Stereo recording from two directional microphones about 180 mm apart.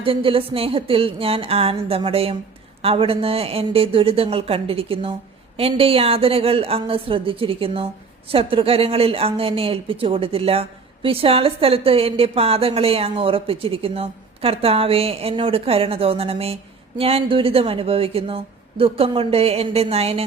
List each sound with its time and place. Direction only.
0.0 s a woman's voice: 30° right (ahead or behind)